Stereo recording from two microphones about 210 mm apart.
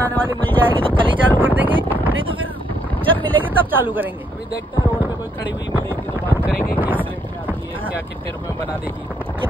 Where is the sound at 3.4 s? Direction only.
10° right (ahead or behind).